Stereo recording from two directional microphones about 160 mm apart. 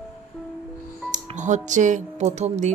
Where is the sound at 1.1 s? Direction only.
50° right (ahead or behind).